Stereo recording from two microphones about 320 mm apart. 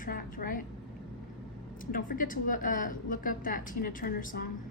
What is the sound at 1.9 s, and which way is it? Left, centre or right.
A woman's voice, left.